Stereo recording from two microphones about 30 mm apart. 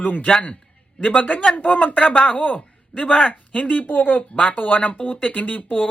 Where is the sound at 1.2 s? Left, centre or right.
Left.